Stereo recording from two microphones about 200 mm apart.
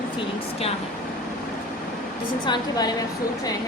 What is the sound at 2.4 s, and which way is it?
Speech, 20° left (ahead or behind).